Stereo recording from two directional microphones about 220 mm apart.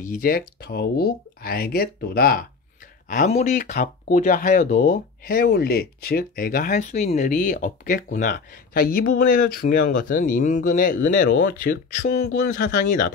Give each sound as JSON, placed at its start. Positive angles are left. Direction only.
{"t": 0.0, "sound": "speech", "side_deg": 40}
{"t": 11.7, "sound": "speech", "side_deg": 50}